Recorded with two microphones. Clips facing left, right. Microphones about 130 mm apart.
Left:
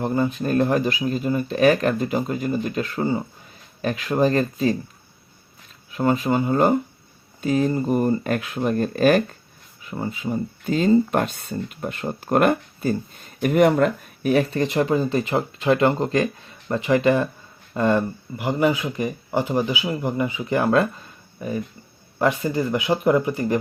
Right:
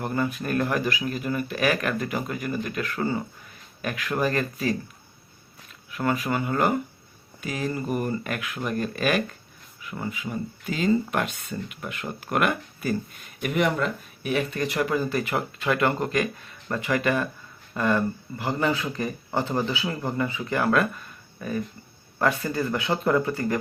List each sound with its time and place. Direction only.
0.0 s speech: 25° left (ahead or behind)
5.9 s speech: 25° left (ahead or behind)